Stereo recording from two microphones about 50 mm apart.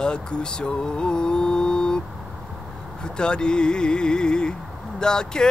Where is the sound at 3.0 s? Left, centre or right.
Centre.